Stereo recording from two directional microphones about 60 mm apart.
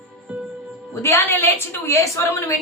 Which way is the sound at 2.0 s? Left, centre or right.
Left.